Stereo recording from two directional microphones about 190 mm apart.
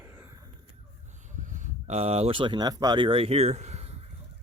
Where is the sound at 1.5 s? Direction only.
40° right (ahead or behind).